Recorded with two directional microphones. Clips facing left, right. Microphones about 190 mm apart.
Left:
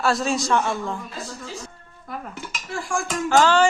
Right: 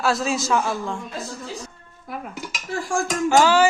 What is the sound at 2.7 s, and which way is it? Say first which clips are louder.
Dishes: right 3 dB; 40° right (ahead or behind).